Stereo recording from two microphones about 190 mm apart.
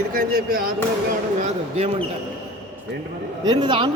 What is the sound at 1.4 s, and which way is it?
Speech, 35° right (ahead or behind).